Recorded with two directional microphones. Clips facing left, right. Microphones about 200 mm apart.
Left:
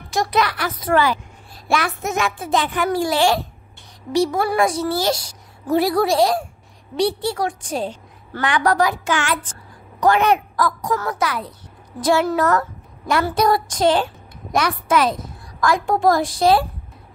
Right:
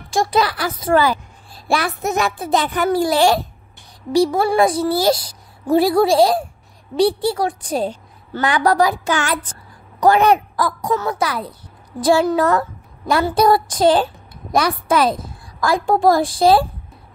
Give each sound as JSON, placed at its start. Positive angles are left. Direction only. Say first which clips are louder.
{"t": 0.1, "sound": "a child's voice", "louder": "right 2 dB", "side_deg": -30}
{"t": 12.4, "sound": "a sound", "louder": "right 2 dB", "side_deg": -30}
{"t": 13.2, "sound": "a child's voice", "louder": "right 4 dB", "side_deg": -30}